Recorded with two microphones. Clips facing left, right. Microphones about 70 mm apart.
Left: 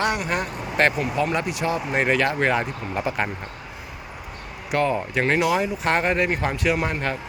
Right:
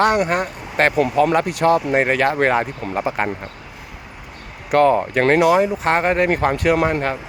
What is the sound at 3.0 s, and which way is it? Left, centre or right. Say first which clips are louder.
Speech: right 4 dB; right.